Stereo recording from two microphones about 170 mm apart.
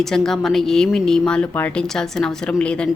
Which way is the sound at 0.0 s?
5° left (ahead or behind).